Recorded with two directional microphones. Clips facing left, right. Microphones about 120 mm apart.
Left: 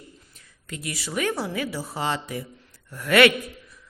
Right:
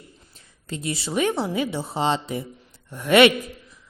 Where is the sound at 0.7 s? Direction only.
25° right (ahead or behind).